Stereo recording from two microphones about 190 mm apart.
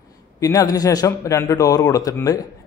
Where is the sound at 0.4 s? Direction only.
20° left (ahead or behind).